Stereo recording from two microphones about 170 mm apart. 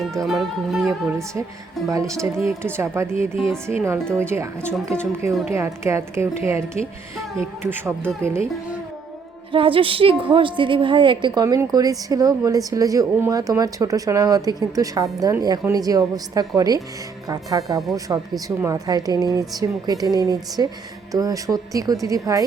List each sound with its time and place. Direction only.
0.3 s speech: centre (ahead or behind)
1.9 s a woman's voice: 20° right (ahead or behind)
5.5 s a woman's voice: 15° right (ahead or behind)
9.5 s a woman's voice: 30° right (ahead or behind)